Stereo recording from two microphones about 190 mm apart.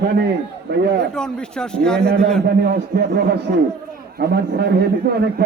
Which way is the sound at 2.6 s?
60° right (ahead or behind).